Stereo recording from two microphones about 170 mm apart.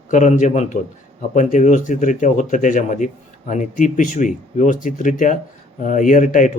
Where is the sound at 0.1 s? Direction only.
45° left (ahead or behind).